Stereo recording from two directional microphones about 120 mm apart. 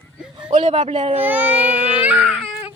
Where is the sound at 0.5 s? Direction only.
70° right (ahead or behind).